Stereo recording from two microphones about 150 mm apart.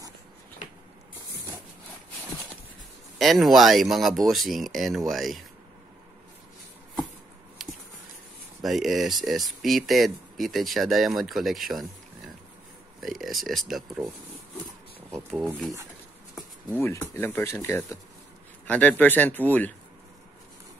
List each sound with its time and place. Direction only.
3.2 s speech: centre (ahead or behind)
7.6 s a sound: centre (ahead or behind)
8.6 s speech: centre (ahead or behind)
13.0 s speech: centre (ahead or behind)
16.7 s speech: 15° left (ahead or behind)